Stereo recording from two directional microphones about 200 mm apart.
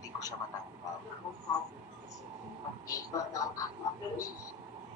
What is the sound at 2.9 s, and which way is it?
Speech, 15° left (ahead or behind).